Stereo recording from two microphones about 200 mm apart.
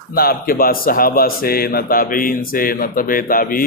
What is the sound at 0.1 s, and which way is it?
Speech, 50° left (ahead or behind).